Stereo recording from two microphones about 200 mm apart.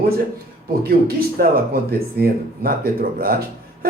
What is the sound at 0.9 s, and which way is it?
Speech, 50° right (ahead or behind).